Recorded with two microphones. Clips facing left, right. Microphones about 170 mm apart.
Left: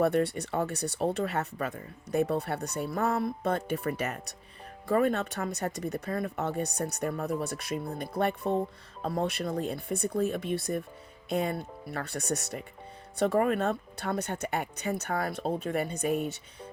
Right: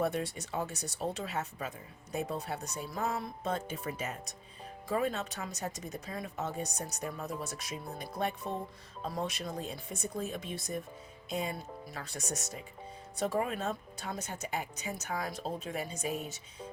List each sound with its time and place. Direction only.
0.0 s speech: 60° left (ahead or behind)